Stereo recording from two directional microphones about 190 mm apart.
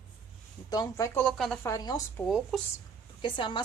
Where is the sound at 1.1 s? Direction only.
5° left (ahead or behind).